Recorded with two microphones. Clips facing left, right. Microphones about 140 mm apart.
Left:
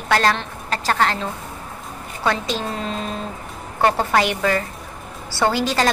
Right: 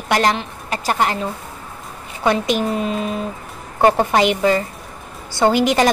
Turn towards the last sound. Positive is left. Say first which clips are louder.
# right 4 dB
turn(degrees=-15)  # may be behind; listen again after turning